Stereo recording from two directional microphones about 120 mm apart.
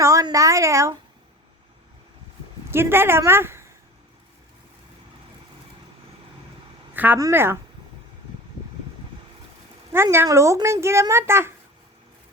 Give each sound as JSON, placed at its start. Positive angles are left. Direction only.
{"t": 0.0, "sound": "a woman's voice", "side_deg": -30}
{"t": 2.6, "sound": "a woman's voice", "side_deg": -20}
{"t": 6.9, "sound": "a woman's voice", "side_deg": -15}
{"t": 9.9, "sound": "a woman's voice", "side_deg": -20}